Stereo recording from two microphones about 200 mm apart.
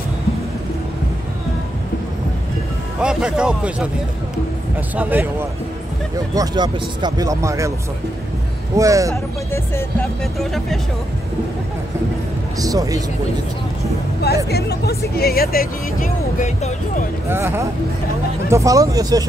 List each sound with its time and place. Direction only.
3.0 s speech: 5° right (ahead or behind)
4.9 s speech: 10° right (ahead or behind)
8.7 s speech: 15° right (ahead or behind)
9.5 s music: 10° left (ahead or behind)
10.4 s speech: centre (ahead or behind)
12.5 s speech: 20° right (ahead or behind)
14.2 s speech: 55° left (ahead or behind); by 16.7 s 35° left (ahead or behind)
17.3 s speech: 10° right (ahead or behind)